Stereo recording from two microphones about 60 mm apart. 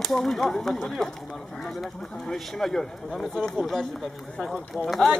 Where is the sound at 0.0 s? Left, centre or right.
Centre.